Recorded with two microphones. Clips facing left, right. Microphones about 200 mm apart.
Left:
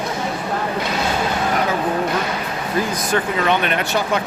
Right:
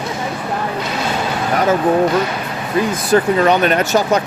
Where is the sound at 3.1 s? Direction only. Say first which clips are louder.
Right 8 dB; 40° right (ahead or behind).